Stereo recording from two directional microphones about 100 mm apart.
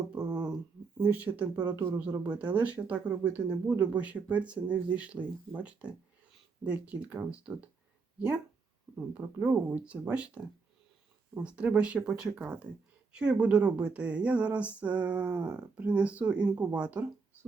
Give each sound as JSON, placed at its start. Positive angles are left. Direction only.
{"t": 0.1, "sound": "a sound", "side_deg": -10}
{"t": 0.9, "sound": "speech", "side_deg": -15}
{"t": 9.0, "sound": "speech", "side_deg": -15}